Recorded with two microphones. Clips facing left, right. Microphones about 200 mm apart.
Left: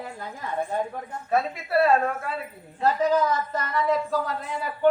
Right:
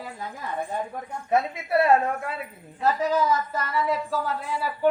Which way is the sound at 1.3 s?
20° right (ahead or behind).